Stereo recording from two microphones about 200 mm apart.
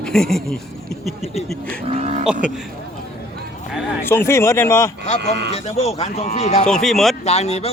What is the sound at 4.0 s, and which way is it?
Speech, 10° left (ahead or behind).